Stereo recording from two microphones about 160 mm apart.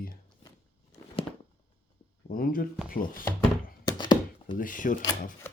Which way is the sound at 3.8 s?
30° left (ahead or behind).